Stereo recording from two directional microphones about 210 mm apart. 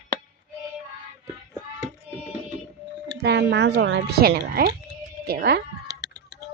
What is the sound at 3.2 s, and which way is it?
Speech, 50° right (ahead or behind).